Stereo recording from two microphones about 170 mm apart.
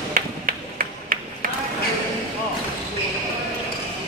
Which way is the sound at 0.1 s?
55° right (ahead or behind).